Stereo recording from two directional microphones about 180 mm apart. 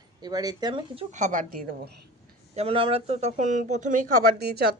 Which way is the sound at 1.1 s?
45° right (ahead or behind).